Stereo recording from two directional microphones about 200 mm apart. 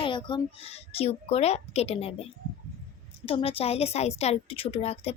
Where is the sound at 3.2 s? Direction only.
30° left (ahead or behind).